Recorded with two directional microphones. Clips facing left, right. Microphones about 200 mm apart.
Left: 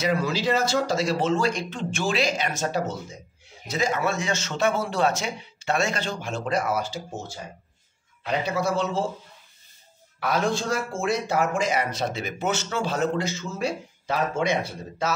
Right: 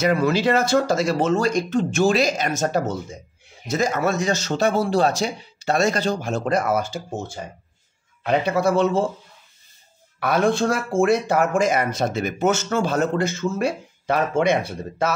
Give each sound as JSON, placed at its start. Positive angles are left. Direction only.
{"t": 0.0, "sound": "speech", "side_deg": -55}
{"t": 10.2, "sound": "speech", "side_deg": -55}